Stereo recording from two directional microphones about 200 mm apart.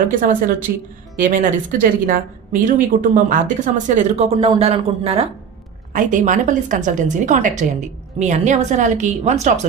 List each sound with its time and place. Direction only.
0.0 s a woman's voice: 45° right (ahead or behind)